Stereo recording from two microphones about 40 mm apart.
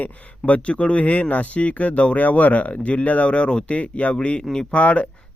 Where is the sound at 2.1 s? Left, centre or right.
Left.